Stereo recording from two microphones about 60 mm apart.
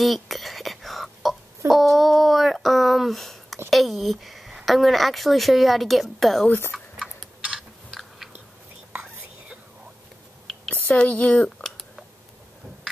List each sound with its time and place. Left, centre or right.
0.0 s whispering: centre
1.7 s a sound: centre
3.7 s speech: centre
6.7 s chewing: centre
10.7 s speech: left